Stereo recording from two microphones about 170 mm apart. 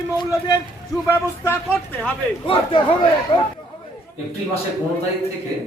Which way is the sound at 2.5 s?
30° left (ahead or behind).